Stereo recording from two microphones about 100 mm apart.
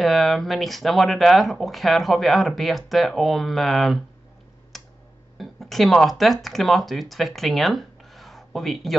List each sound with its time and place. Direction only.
0.0 s speech: centre (ahead or behind)
4.7 s computer keyboard: centre (ahead or behind)
5.4 s speech: centre (ahead or behind)